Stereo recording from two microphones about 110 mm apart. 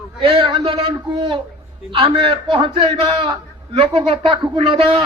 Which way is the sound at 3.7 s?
60° right (ahead or behind).